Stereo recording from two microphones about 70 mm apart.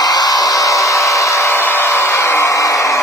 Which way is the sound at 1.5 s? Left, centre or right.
Left.